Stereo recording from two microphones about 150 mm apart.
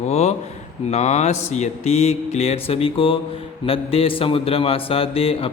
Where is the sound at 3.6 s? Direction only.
40° left (ahead or behind).